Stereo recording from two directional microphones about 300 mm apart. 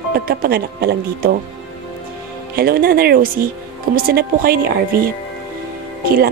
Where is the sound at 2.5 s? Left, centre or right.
Right.